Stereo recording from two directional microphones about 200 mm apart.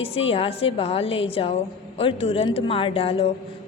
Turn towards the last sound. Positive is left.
turn(degrees=30)  # may be behind; listen again after turning